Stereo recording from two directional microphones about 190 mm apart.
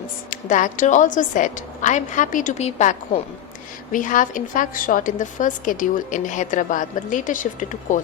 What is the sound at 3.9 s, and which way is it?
A woman's voice, 45° left (ahead or behind).